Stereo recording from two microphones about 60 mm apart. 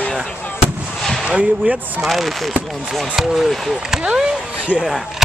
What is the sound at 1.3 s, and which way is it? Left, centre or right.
Speech, centre.